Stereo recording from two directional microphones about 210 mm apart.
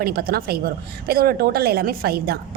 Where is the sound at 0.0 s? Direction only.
45° right (ahead or behind).